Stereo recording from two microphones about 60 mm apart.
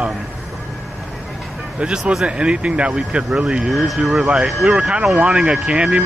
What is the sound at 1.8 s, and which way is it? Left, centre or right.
Speech, centre.